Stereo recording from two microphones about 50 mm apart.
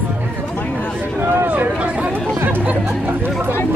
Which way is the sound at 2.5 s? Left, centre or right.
Right.